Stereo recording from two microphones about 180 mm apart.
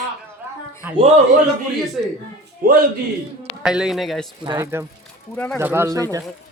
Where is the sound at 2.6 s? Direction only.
50° right (ahead or behind).